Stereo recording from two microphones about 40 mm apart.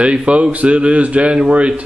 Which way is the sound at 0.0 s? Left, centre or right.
Right.